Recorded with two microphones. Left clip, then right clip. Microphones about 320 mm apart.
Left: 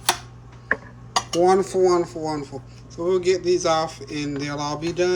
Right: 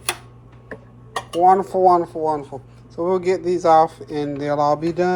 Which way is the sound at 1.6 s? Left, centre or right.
Centre.